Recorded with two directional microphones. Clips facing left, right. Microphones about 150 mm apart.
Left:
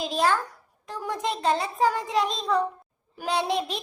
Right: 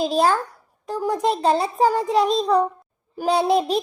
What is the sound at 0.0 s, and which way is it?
A child's voice, 35° right (ahead or behind).